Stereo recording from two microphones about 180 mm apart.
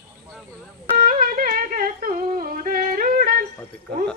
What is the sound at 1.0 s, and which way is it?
Humming, 50° right (ahead or behind).